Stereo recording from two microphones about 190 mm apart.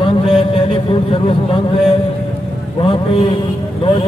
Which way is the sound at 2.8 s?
30° left (ahead or behind).